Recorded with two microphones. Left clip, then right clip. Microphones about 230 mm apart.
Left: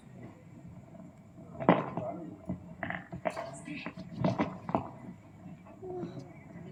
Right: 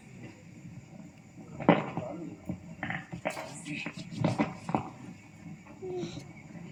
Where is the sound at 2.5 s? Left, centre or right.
Right.